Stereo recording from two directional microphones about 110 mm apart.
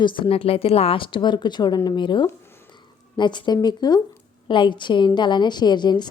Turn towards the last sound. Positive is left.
turn(degrees=40)  # may be behind; listen again after turning